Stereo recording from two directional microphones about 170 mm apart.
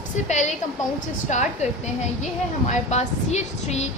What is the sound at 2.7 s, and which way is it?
A woman's voice, 40° left (ahead or behind).